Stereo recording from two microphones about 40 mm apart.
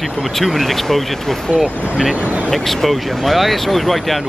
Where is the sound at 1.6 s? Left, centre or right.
Centre.